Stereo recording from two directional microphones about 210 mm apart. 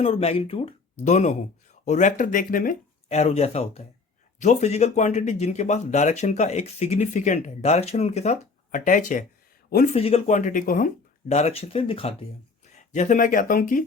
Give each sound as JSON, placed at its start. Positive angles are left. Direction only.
{"t": 0.0, "sound": "speech", "side_deg": 30}